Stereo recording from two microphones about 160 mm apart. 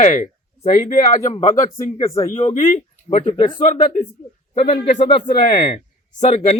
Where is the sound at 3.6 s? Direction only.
55° left (ahead or behind).